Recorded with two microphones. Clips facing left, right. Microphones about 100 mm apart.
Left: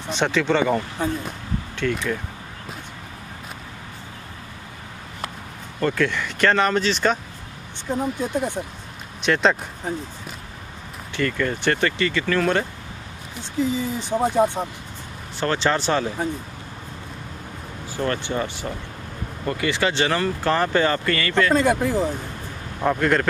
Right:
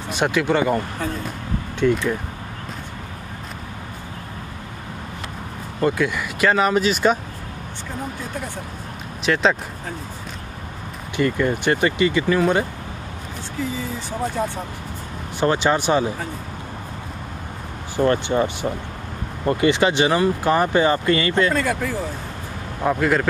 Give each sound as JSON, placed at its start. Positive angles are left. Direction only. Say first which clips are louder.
{"t": 0.1, "sound": "speech", "louder": "right 1 dB", "side_deg": -10}
{"t": 1.8, "sound": "speech", "louder": "right 6 dB", "side_deg": -20}
{"t": 5.8, "sound": "speech", "louder": "right 1 dB", "side_deg": -15}
{"t": 9.2, "sound": "speech", "louder": "even", "side_deg": 0}
{"t": 11.1, "sound": "speech", "louder": "right 4 dB", "side_deg": -15}
{"t": 13.6, "sound": "speech", "louder": "left 4 dB", "side_deg": 20}
{"t": 15.4, "sound": "speech", "louder": "right 3 dB", "side_deg": -15}
{"t": 17.9, "sound": "speech", "louder": "right 6 dB", "side_deg": -20}
{"t": 21.5, "sound": "speech", "louder": "left 3 dB", "side_deg": 20}
{"t": 22.8, "sound": "speech", "louder": "right 1 dB", "side_deg": -5}